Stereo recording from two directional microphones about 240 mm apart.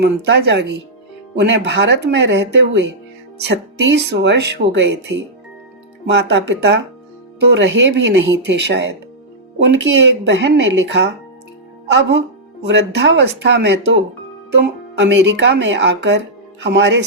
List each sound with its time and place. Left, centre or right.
0.0 s speech: right
12.6 s speech: right
14.9 s speech: right